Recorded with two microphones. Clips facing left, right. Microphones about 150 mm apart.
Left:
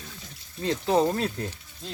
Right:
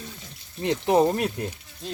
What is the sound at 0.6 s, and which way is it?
Speech, 20° right (ahead or behind).